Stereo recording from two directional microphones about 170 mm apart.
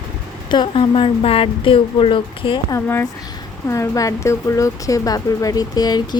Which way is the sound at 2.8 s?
15° left (ahead or behind).